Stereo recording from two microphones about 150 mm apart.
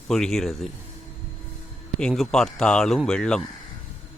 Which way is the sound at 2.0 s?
5° left (ahead or behind).